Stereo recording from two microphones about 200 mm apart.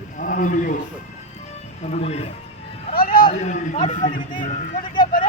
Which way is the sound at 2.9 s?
45° left (ahead or behind).